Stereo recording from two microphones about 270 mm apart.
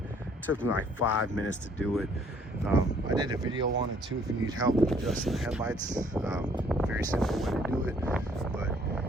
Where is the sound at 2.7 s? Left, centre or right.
Centre.